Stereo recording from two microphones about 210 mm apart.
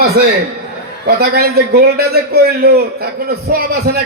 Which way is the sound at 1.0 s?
50° right (ahead or behind).